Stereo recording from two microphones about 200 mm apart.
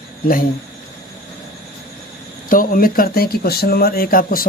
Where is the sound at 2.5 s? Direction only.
45° left (ahead or behind).